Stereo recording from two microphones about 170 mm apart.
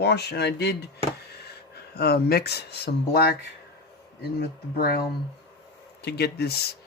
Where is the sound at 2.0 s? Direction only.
70° left (ahead or behind).